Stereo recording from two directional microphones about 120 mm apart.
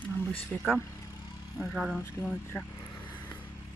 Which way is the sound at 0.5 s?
10° left (ahead or behind).